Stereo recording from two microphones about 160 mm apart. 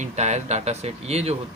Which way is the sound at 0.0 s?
45° right (ahead or behind).